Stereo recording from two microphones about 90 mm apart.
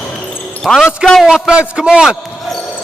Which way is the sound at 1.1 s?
5° right (ahead or behind).